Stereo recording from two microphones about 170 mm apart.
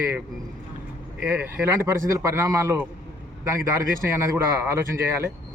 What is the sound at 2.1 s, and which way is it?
Speech, 15° right (ahead or behind).